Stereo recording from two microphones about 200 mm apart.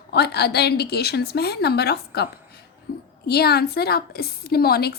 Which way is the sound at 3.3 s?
50° left (ahead or behind).